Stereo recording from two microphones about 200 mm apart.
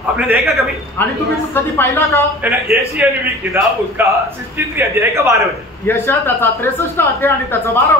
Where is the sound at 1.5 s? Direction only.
10° left (ahead or behind).